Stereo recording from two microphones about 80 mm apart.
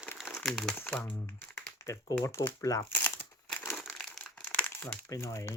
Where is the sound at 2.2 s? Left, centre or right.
Left.